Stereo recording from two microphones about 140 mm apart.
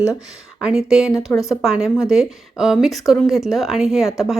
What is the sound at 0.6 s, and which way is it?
Speech, 5° right (ahead or behind).